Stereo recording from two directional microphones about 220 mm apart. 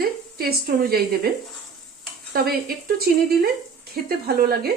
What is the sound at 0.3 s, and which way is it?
Speech, 45° right (ahead or behind).